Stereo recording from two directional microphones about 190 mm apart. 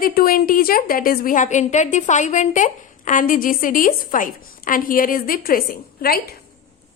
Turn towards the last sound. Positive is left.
turn(degrees=55)  # may be behind; listen again after turning